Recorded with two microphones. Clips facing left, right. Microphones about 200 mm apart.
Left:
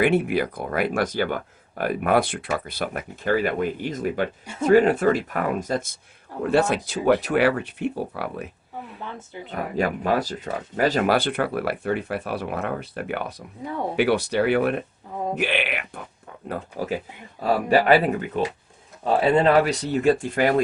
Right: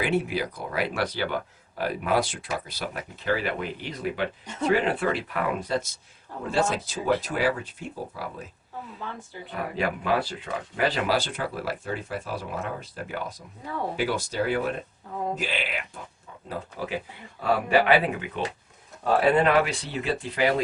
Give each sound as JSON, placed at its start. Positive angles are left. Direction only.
{"t": 0.0, "sound": "speech", "side_deg": 55}
{"t": 6.5, "sound": "speech", "side_deg": 60}
{"t": 9.7, "sound": "speech", "side_deg": 45}
{"t": 16.8, "sound": "speech", "side_deg": 45}
{"t": 19.0, "sound": "speech", "side_deg": 25}
{"t": 19.6, "sound": "speech", "side_deg": 40}